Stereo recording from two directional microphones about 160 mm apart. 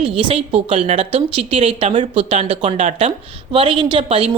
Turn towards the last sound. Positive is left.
turn(degrees=-40)  # may be behind; listen again after turning